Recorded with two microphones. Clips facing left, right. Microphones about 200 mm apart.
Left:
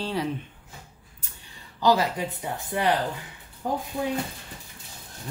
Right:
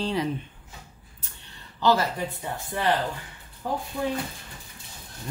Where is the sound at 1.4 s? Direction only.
10° left (ahead or behind).